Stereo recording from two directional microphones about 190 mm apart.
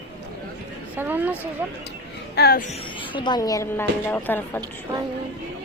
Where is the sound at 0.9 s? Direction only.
10° right (ahead or behind).